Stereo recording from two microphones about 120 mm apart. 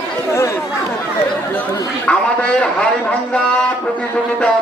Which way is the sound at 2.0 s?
10° left (ahead or behind).